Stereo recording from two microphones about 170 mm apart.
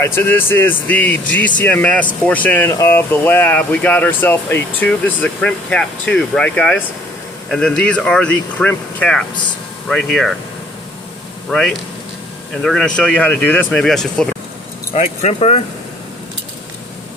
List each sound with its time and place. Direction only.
0.0 s speech: 15° left (ahead or behind)
11.5 s speech: centre (ahead or behind)
14.9 s speech: 45° left (ahead or behind)